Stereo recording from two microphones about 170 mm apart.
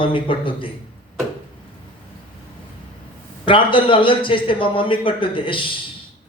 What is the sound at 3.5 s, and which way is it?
A man's voice, 30° left (ahead or behind).